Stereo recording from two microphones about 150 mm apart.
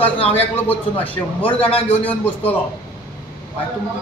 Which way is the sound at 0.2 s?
40° left (ahead or behind).